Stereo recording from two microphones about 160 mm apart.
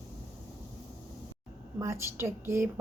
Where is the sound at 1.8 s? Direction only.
15° right (ahead or behind).